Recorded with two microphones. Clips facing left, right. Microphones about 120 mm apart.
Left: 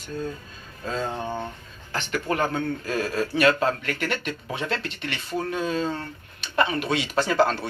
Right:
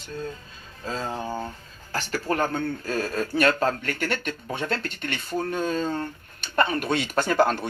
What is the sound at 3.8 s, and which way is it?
Speech, 35° right (ahead or behind).